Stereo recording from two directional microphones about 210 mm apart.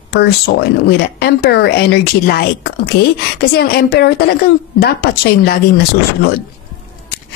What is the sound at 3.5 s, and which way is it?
A woman's voice, 50° left (ahead or behind).